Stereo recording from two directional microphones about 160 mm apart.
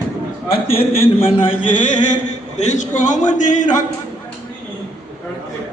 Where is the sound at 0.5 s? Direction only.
35° left (ahead or behind).